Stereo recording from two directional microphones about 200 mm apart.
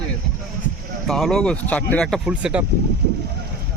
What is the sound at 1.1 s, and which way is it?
Speech, centre (ahead or behind).